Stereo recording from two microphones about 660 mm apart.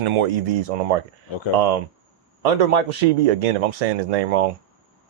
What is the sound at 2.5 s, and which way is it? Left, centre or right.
Speech, right.